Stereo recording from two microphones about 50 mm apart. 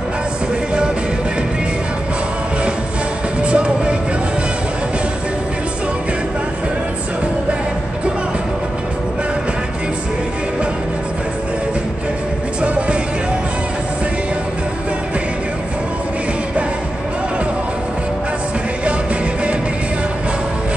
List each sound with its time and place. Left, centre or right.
3.4 s music: right
12.6 s music: right